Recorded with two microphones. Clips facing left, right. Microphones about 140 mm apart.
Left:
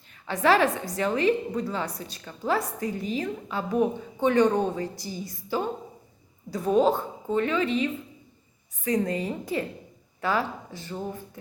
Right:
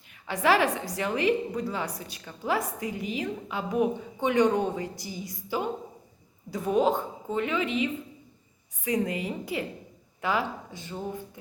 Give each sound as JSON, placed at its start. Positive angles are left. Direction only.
{"t": 0.3, "sound": "a woman's voice", "side_deg": -15}
{"t": 6.7, "sound": "a woman's voice", "side_deg": -15}